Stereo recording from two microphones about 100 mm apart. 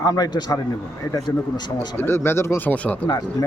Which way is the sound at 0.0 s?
40° left (ahead or behind).